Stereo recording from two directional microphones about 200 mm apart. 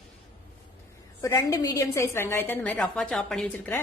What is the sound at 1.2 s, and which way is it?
A woman's voice, 15° left (ahead or behind).